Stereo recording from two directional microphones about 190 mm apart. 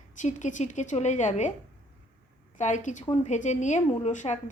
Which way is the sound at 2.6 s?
40° left (ahead or behind).